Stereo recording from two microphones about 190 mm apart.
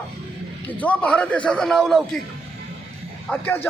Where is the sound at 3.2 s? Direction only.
10° left (ahead or behind).